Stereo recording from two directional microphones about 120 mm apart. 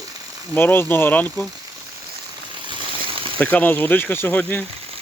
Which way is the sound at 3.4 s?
15° left (ahead or behind).